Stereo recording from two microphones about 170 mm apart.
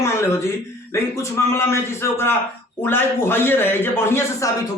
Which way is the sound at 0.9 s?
15° left (ahead or behind).